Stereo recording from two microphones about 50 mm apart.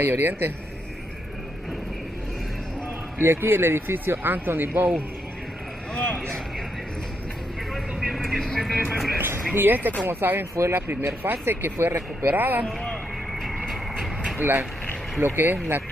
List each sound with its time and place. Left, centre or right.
0.0 s speech: right
3.2 s speech: right
5.9 s a sound: centre
8.0 s vehicle: centre
8.5 s speech: centre
9.5 s speech: right
10.7 s speech: right
13.3 s vehicle: centre
15.1 s speech: right